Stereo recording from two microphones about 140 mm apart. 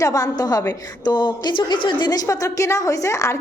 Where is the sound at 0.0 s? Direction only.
25° left (ahead or behind).